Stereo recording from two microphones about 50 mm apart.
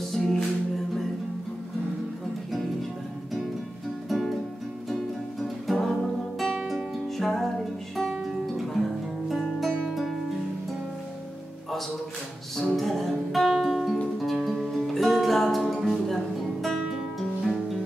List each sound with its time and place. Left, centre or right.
0.1 s music: centre
4.1 s music: centre
5.4 s music: centre
8.1 s music: centre
12.5 s music: centre